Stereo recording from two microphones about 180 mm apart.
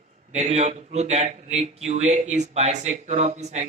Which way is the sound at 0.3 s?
35° right (ahead or behind).